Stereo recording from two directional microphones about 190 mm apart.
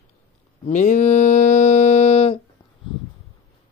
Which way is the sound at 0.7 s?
40° left (ahead or behind).